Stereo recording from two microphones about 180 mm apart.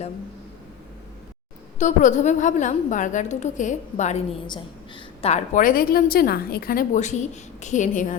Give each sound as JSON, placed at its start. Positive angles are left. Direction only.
{"t": 1.8, "sound": "a woman's voice", "side_deg": 45}